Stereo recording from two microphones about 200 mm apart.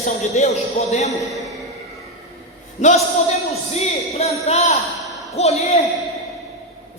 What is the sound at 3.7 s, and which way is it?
A man's voice, 30° left (ahead or behind).